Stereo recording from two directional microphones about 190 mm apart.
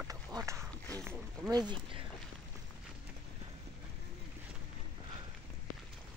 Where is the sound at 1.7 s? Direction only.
25° right (ahead or behind).